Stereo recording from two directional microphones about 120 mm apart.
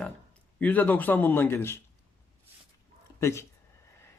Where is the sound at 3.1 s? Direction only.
25° left (ahead or behind).